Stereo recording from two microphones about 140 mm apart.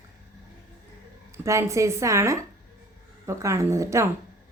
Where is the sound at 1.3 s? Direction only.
20° right (ahead or behind).